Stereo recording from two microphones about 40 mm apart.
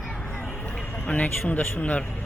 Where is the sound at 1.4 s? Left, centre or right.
Left.